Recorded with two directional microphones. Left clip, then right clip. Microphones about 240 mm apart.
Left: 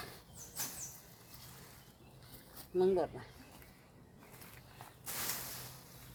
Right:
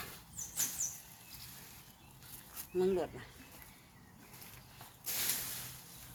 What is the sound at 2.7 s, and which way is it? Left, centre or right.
Speech, centre.